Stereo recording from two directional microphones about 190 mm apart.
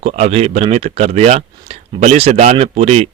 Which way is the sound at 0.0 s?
35° right (ahead or behind).